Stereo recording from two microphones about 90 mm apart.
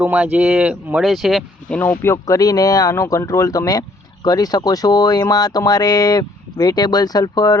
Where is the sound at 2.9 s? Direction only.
30° left (ahead or behind).